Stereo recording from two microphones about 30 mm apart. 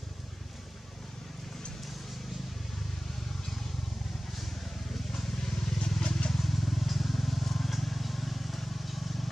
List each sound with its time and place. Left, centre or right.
5.1 s vehicle: centre
6.0 s vehicle: left
6.3 s vehicle: centre